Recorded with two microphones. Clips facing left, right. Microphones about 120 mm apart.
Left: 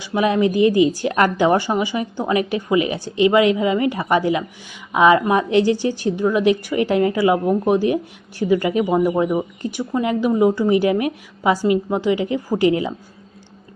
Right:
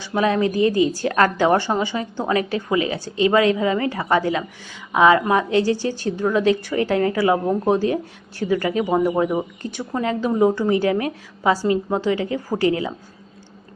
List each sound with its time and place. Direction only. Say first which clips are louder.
0.0 s a woman's voice: left 2 dB; 15° left (ahead or behind)